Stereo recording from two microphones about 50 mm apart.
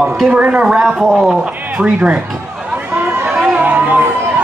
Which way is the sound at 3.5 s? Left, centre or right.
Right.